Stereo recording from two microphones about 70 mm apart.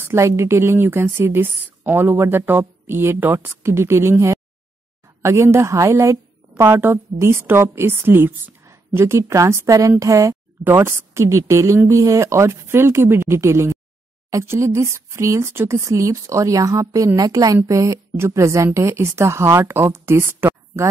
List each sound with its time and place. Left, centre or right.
0.0 s a woman's voice: right
8.6 s a woman's voice: right
10.6 s a woman's voice: right
17.9 s a woman's voice: right